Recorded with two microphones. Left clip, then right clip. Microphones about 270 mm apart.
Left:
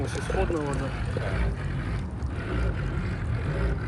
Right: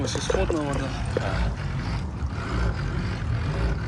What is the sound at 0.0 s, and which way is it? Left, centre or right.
Speech, centre.